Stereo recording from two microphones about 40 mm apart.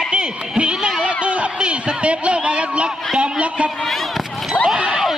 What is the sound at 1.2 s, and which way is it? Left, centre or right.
Speech, right.